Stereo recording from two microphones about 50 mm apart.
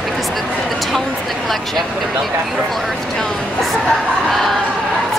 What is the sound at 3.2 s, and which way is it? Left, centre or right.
A woman's voice, centre.